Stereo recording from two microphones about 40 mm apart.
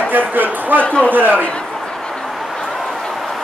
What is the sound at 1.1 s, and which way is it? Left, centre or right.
Speech, right.